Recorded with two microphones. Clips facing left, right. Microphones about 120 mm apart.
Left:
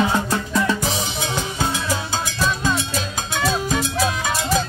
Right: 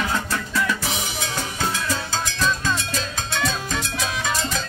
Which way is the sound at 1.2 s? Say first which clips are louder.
Left 2 dB; 15° left (ahead or behind).